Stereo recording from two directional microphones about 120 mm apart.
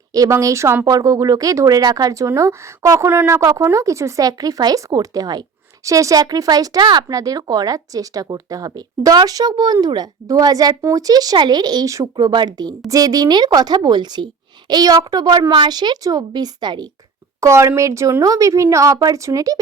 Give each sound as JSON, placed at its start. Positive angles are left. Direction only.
{"t": 0.1, "sound": "speech", "side_deg": -30}
{"t": 17.4, "sound": "a woman's voice", "side_deg": -25}